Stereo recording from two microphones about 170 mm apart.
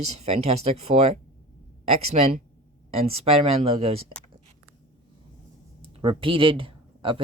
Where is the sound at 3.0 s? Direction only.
35° right (ahead or behind).